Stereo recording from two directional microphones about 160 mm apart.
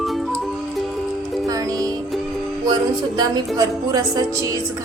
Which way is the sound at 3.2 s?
25° right (ahead or behind).